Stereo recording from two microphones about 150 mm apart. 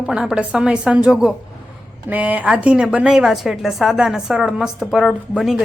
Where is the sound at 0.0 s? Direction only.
5° right (ahead or behind).